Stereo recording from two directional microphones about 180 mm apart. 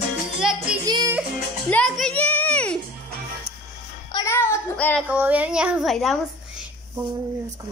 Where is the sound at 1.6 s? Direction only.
5° left (ahead or behind).